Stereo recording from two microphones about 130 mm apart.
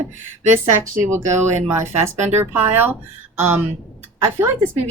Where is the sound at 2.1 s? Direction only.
65° right (ahead or behind).